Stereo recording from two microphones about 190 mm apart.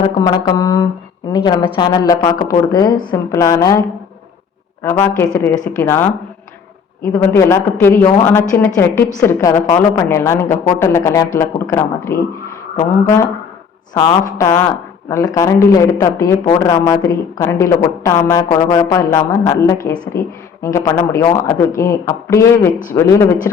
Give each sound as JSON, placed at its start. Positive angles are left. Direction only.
{"t": 0.4, "sound": "a woman's voice", "side_deg": 20}